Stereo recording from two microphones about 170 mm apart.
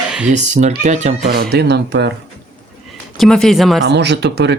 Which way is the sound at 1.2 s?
65° right (ahead or behind).